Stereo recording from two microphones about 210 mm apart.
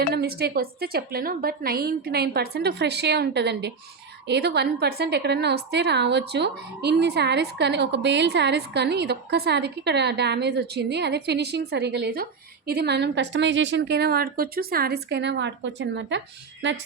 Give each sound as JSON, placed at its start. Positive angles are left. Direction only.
{"t": 0.1, "sound": "a woman's voice", "side_deg": -50}